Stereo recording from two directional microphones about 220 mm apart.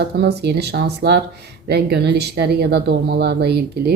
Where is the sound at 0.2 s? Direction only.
50° right (ahead or behind).